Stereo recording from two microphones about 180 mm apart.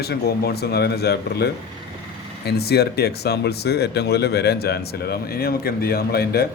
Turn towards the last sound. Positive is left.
turn(degrees=60)  # may be behind; listen again after turning